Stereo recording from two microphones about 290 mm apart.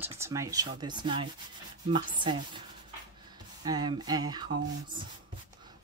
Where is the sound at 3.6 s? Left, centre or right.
Centre.